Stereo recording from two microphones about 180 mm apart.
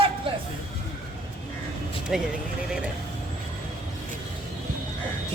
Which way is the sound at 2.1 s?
5° right (ahead or behind).